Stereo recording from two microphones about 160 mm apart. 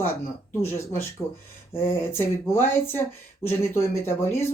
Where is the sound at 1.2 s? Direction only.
10° left (ahead or behind).